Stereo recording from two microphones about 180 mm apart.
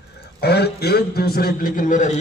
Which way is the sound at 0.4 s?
65° left (ahead or behind).